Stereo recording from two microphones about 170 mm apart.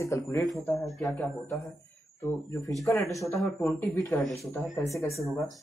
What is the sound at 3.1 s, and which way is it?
Speech, 20° left (ahead or behind).